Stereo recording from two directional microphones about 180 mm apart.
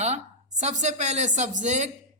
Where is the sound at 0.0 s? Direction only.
40° right (ahead or behind).